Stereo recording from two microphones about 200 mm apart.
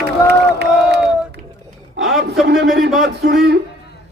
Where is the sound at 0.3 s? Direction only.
55° right (ahead or behind).